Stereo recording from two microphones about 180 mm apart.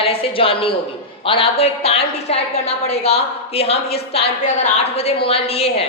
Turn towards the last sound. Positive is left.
turn(degrees=35)  # may be behind; listen again after turning